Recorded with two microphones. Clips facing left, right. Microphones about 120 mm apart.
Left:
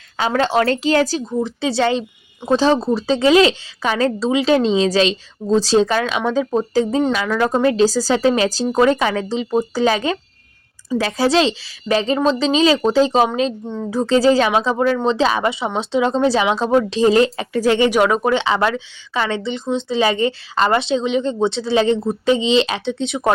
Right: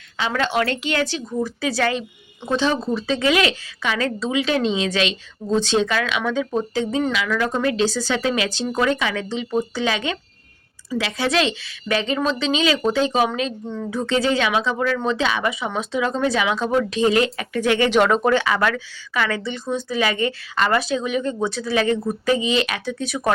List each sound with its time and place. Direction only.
0.2 s a woman's voice: 30° left (ahead or behind)
1.3 s a woman's voice: 20° left (ahead or behind)
17.8 s speech: 10° left (ahead or behind)
18.3 s speech: 25° left (ahead or behind)